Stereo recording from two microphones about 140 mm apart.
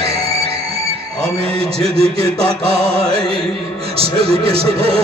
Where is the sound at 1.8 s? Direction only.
45° right (ahead or behind).